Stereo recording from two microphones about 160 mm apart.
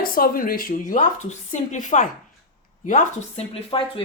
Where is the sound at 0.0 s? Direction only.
60° left (ahead or behind).